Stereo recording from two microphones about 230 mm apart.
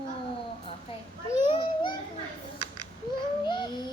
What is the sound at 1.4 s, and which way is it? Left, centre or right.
Children playing, left.